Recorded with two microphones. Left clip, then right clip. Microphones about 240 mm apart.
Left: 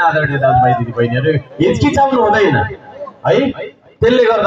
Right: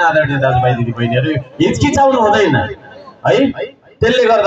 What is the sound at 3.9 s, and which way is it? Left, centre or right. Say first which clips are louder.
Speech: even; right.